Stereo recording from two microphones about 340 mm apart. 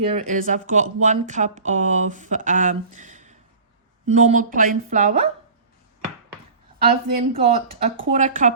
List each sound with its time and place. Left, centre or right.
0.1 s speech: right
6.8 s speech: centre